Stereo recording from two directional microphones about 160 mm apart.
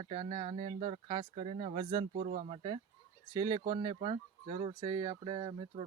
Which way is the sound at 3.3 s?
25° right (ahead or behind).